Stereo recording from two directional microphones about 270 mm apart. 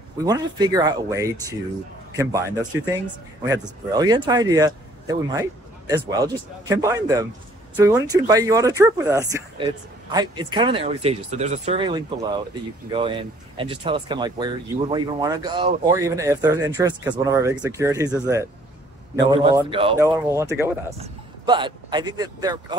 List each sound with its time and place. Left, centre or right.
0.2 s speech: centre